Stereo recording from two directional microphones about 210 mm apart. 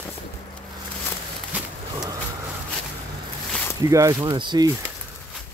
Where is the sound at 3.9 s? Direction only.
15° right (ahead or behind).